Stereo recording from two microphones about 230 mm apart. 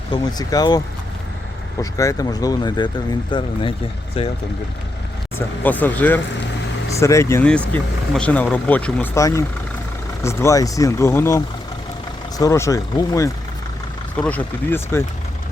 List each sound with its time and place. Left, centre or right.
0.1 s speech: centre
1.8 s speech: centre
5.6 s speech: centre